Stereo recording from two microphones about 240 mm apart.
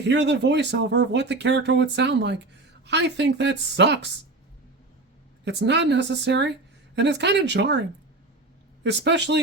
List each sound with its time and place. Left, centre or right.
0.1 s speech: right
5.5 s speech: right